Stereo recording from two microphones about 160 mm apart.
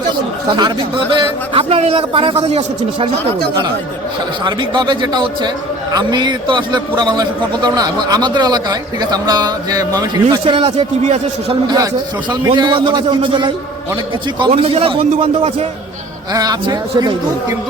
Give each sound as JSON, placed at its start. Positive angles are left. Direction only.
{"t": 0.5, "sound": "a man's voice", "side_deg": -30}
{"t": 4.4, "sound": "a man's voice", "side_deg": -30}
{"t": 12.3, "sound": "a man's voice", "side_deg": -25}
{"t": 16.3, "sound": "a man's voice", "side_deg": -25}